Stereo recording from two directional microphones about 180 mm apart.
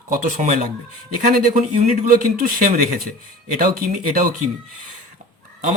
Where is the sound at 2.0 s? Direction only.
50° right (ahead or behind).